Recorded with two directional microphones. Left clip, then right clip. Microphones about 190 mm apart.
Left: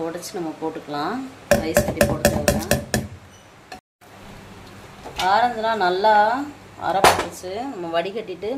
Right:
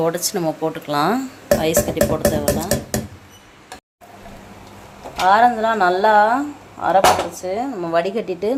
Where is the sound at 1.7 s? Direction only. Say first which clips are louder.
Right 2 dB; 10° left (ahead or behind).